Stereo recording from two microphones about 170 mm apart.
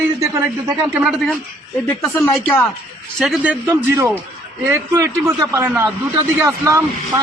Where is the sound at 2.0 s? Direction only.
15° left (ahead or behind).